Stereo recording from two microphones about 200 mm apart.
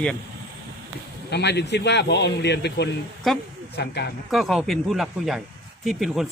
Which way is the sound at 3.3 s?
Centre (ahead or behind).